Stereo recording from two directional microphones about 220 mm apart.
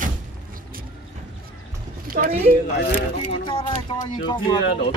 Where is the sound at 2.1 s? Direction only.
40° right (ahead or behind).